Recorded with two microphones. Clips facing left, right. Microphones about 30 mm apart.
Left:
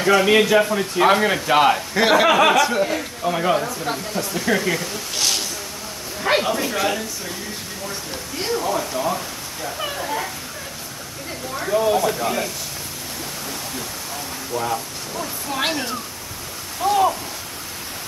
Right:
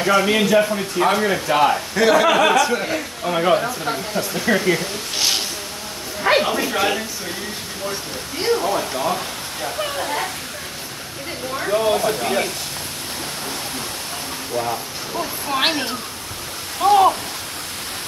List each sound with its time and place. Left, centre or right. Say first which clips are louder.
0.0 s a man's voice: left 1 dB; centre
2.2 s a man's voice: even; centre
2.7 s speech: left 1 dB; centre
4.7 s a sound: right 1 dB; centre
8.4 s speech: right 3 dB; centre
9.6 s a sound: right 2 dB; right
11.5 s speech: even; centre
11.9 s speech: right 1 dB; right
15.1 s speech: right 3 dB; right
16.8 s speech: right 4 dB; right